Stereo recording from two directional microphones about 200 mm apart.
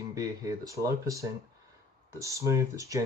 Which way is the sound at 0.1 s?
15° right (ahead or behind).